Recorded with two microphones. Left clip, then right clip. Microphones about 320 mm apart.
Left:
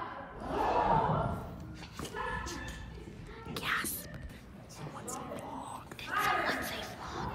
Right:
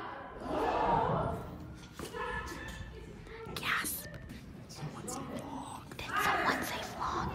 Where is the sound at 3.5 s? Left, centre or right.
Centre.